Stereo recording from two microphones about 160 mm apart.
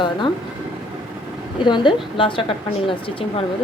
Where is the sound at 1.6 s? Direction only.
30° left (ahead or behind).